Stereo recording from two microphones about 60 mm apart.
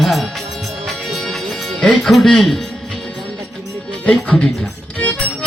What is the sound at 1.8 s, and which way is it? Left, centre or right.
Speech, centre.